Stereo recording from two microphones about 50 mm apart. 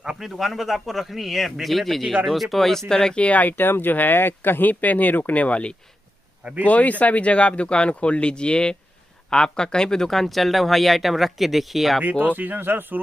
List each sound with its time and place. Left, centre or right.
0.0 s a sound: centre
0.4 s speech: centre
3.2 s speech: left
3.5 s speech: left; by 12.0 s centre
12.0 s speech: right